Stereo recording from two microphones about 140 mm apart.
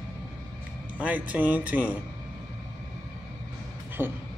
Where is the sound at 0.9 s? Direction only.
10° right (ahead or behind).